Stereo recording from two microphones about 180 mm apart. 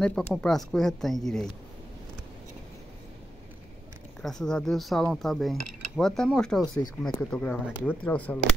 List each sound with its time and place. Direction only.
0.0 s speech: 5° left (ahead or behind)
4.2 s speech: 5° left (ahead or behind)